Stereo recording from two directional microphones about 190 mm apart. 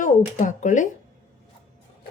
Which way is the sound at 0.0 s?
40° left (ahead or behind).